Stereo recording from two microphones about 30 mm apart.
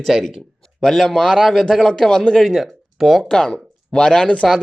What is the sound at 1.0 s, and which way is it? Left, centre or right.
Speech, left.